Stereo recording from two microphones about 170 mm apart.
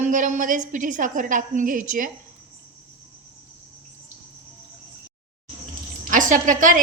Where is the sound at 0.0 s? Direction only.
50° right (ahead or behind).